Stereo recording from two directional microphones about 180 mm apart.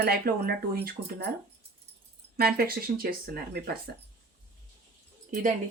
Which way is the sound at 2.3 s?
60° right (ahead or behind).